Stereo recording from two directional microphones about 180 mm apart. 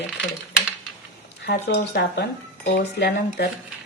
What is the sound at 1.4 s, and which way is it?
Speech, 65° left (ahead or behind).